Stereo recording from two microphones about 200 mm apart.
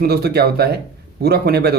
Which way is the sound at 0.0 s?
50° right (ahead or behind).